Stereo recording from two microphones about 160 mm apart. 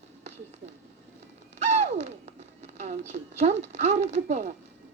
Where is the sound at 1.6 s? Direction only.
45° right (ahead or behind).